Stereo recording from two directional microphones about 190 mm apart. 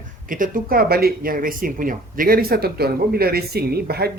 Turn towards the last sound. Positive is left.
turn(degrees=-55)  # may be behind; listen again after turning